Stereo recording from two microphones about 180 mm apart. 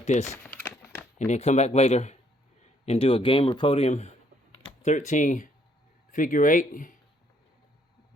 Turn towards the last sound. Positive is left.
turn(degrees=45)  # may be behind; listen again after turning